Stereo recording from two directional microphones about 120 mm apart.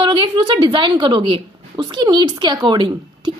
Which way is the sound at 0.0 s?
40° right (ahead or behind).